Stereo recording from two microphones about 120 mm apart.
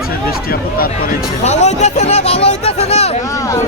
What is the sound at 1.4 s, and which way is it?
Speech, 70° left (ahead or behind).